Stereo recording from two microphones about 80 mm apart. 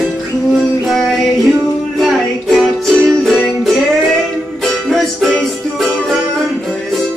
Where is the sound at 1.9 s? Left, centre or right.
Centre.